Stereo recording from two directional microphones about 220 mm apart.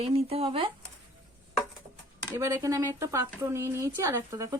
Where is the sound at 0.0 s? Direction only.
25° right (ahead or behind).